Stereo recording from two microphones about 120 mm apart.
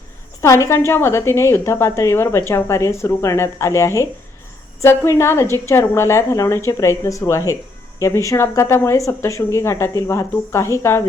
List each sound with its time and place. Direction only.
0.4 s a woman's voice: 25° left (ahead or behind)